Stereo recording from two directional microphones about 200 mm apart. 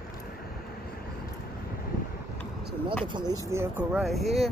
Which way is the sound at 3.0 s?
20° right (ahead or behind).